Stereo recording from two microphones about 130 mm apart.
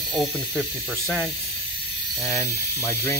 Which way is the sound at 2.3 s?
20° left (ahead or behind).